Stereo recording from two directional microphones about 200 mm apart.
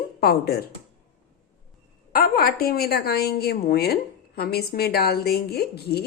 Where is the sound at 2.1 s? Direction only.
50° left (ahead or behind).